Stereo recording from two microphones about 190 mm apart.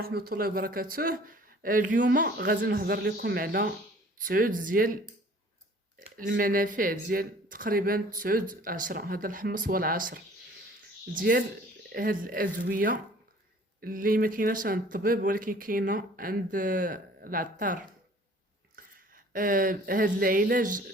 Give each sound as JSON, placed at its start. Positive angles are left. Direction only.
{"t": 0.0, "sound": "speech", "side_deg": -55}
{"t": 4.2, "sound": "speech", "side_deg": -45}
{"t": 6.1, "sound": "speech", "side_deg": -50}